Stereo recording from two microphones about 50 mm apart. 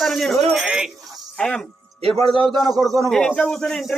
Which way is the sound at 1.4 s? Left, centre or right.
Centre.